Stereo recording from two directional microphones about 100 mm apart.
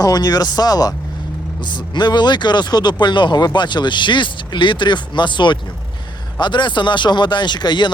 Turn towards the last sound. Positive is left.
turn(degrees=50)  # may be behind; listen again after turning